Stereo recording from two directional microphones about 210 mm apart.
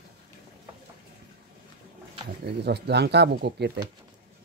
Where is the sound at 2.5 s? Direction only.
50° right (ahead or behind).